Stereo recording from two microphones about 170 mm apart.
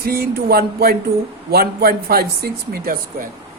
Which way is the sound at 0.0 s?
65° right (ahead or behind).